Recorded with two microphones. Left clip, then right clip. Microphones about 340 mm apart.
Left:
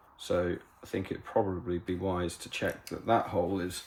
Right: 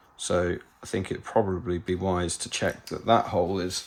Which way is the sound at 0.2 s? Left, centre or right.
Right.